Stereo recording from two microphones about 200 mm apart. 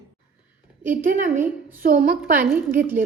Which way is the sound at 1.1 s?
40° right (ahead or behind).